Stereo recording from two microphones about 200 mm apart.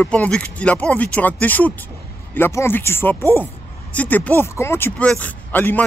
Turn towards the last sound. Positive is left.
turn(degrees=10)  # may be behind; listen again after turning